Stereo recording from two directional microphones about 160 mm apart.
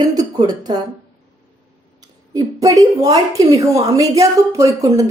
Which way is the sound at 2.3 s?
20° right (ahead or behind).